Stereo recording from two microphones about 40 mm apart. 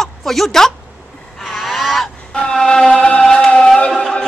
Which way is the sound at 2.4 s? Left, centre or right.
Left.